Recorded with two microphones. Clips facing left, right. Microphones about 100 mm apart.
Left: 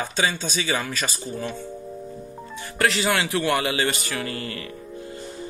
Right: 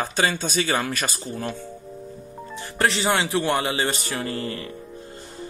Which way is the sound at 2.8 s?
20° right (ahead or behind).